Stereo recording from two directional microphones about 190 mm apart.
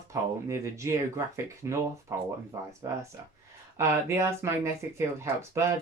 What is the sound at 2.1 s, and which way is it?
Speech, 15° right (ahead or behind).